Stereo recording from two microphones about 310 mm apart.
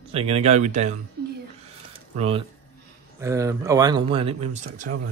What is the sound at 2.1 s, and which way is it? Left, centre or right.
Speech, centre.